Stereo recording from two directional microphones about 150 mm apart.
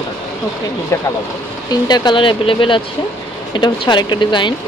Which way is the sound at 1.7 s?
25° left (ahead or behind).